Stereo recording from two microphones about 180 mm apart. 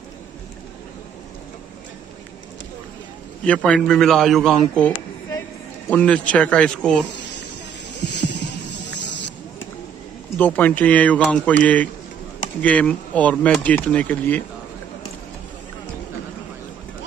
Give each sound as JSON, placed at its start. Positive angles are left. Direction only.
{"t": 3.4, "sound": "a man's voice", "side_deg": 5}
{"t": 8.0, "sound": "music", "side_deg": 75}
{"t": 10.3, "sound": "speech", "side_deg": 10}